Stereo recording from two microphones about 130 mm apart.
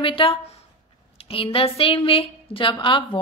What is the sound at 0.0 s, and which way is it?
A woman's voice, 45° left (ahead or behind).